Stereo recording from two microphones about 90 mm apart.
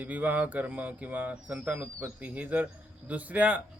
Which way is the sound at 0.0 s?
20° right (ahead or behind).